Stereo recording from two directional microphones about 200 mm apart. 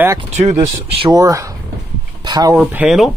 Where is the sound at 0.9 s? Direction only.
25° right (ahead or behind).